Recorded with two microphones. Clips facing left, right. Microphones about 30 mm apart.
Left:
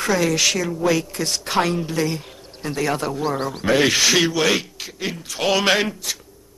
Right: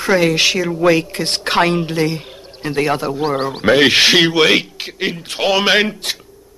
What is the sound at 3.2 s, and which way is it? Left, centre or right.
Speech, right.